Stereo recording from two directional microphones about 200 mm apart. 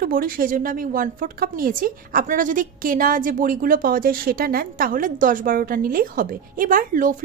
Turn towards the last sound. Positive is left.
turn(degrees=-45)  # may be behind; listen again after turning